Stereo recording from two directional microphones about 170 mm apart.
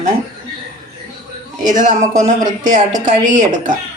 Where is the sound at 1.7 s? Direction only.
45° right (ahead or behind).